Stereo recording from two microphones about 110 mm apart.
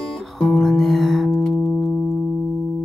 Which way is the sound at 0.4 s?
5° left (ahead or behind).